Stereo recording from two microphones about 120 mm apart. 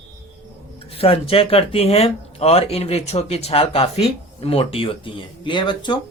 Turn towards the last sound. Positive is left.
turn(degrees=40)  # may be behind; listen again after turning